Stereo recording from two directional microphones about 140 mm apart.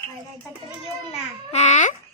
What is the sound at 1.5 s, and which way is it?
Speech, 55° left (ahead or behind).